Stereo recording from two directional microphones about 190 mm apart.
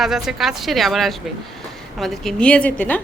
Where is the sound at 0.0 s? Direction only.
Centre (ahead or behind).